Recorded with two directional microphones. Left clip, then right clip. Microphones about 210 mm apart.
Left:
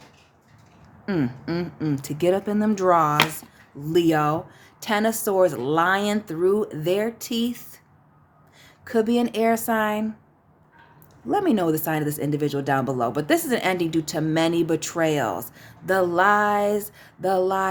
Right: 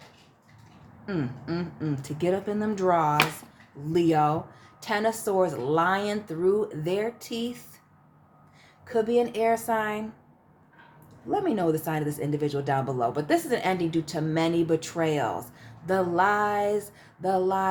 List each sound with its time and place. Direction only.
1.0 s speech: 30° left (ahead or behind)
8.8 s speech: 45° left (ahead or behind)
11.3 s speech: 40° left (ahead or behind)